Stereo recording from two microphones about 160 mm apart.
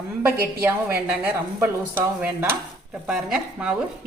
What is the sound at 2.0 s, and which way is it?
A woman's voice, 10° right (ahead or behind).